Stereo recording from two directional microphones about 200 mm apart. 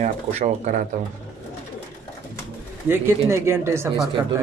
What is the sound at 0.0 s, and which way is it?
Speech, 35° right (ahead or behind).